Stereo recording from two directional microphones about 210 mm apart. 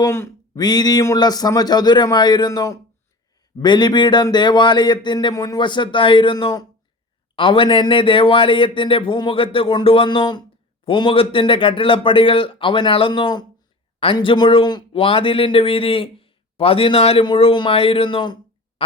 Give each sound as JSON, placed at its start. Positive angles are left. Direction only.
{"t": 0.0, "sound": "speech", "side_deg": 10}